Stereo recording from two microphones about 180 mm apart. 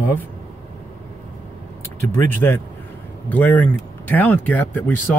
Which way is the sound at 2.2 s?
10° left (ahead or behind).